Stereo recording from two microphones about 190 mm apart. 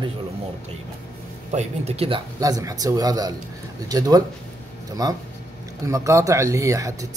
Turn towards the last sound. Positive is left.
turn(degrees=-15)  # may be behind; listen again after turning